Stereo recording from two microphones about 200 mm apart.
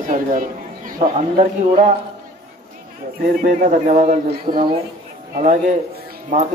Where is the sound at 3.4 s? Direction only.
40° right (ahead or behind).